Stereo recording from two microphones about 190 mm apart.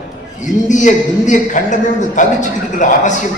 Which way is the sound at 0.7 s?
40° left (ahead or behind).